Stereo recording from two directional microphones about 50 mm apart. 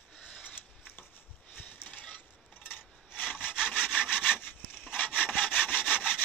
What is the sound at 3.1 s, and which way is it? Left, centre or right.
Sawing, left.